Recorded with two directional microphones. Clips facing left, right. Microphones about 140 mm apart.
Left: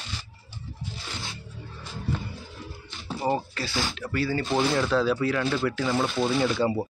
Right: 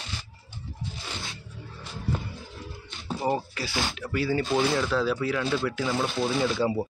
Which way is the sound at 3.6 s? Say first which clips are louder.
Left 1 dB; 20° right (ahead or behind).